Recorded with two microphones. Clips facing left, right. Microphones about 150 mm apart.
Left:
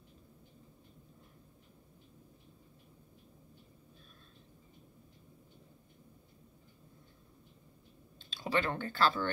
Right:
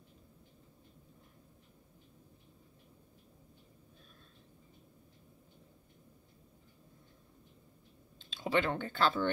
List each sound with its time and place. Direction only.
8.2 s speech: 20° right (ahead or behind)